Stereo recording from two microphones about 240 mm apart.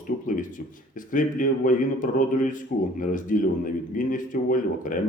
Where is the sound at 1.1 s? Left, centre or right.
Left.